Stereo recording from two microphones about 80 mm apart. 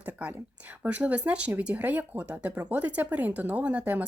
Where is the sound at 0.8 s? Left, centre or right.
Centre.